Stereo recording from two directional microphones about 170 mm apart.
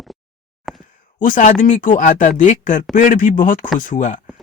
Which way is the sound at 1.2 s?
50° left (ahead or behind).